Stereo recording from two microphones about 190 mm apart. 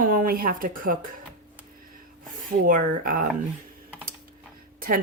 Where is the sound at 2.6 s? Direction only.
45° right (ahead or behind).